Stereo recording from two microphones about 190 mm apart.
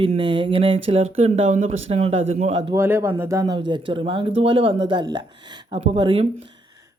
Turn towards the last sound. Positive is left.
turn(degrees=-25)  # may be behind; listen again after turning